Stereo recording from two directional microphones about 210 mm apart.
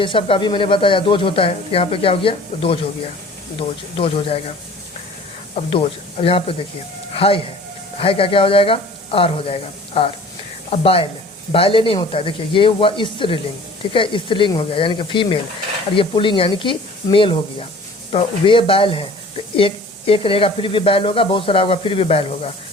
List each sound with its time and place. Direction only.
0.0 s speech: 25° left (ahead or behind)
3.9 s speech: 25° left (ahead or behind)
5.5 s speech: 30° left (ahead or behind)